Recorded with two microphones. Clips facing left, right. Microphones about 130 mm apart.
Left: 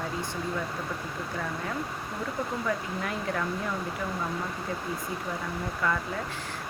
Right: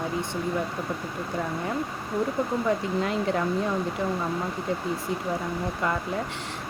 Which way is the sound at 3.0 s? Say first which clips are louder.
Right 5 dB; 25° right (ahead or behind).